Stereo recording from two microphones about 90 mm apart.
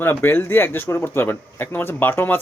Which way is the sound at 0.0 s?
25° left (ahead or behind).